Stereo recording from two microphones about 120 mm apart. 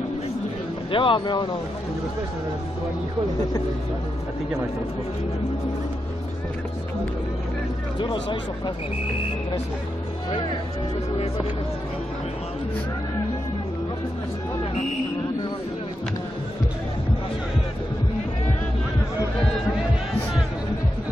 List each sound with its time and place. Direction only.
0.9 s speech: 45° left (ahead or behind)
8.0 s speech: 45° left (ahead or behind)